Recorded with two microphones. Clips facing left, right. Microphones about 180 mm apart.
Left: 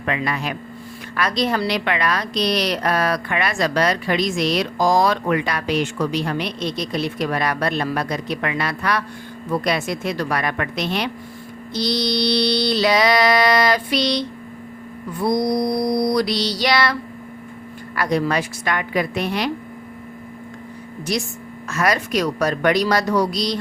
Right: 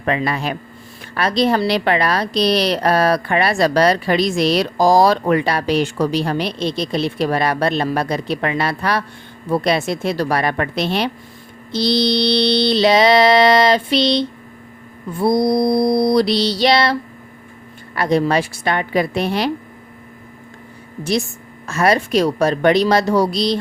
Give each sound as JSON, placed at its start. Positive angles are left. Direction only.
{"t": 0.0, "sound": "a woman's voice", "side_deg": -35}
{"t": 11.7, "sound": "mantra", "side_deg": -30}
{"t": 21.1, "sound": "mantra", "side_deg": -25}